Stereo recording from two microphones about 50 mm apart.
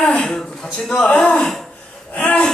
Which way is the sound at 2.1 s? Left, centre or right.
Left.